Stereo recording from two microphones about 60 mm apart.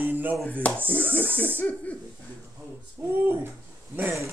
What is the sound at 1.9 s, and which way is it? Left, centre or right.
Snicker, left.